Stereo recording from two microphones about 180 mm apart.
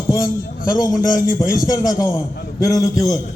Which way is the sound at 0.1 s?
20° left (ahead or behind).